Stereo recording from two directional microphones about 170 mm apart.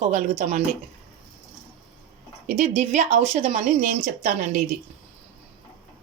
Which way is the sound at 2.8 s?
45° right (ahead or behind).